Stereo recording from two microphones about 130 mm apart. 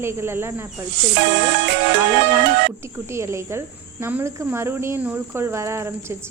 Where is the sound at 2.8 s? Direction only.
20° right (ahead or behind).